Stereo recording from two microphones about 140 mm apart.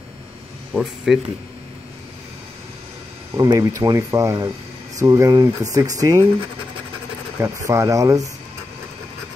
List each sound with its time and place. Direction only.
0.7 s speech: 5° right (ahead or behind)
3.3 s speech: 25° right (ahead or behind)
7.3 s speech: 20° right (ahead or behind)